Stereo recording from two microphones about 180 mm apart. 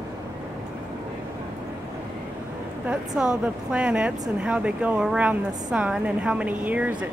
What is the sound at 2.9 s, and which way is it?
Speech, 5° right (ahead or behind).